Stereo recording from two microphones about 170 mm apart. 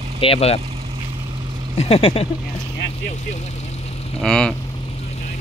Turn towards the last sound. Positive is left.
turn(degrees=5)  # may be behind; listen again after turning